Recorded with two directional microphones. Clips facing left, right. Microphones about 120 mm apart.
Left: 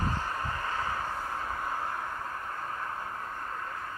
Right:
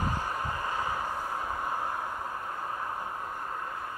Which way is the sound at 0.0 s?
15° right (ahead or behind).